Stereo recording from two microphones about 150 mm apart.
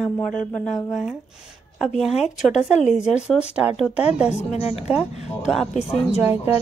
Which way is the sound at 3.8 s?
5° right (ahead or behind).